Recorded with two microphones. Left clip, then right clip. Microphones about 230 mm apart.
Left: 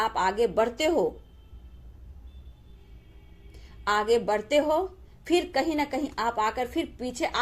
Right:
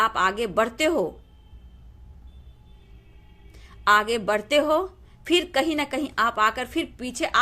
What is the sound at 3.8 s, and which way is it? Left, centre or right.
A woman's voice, right.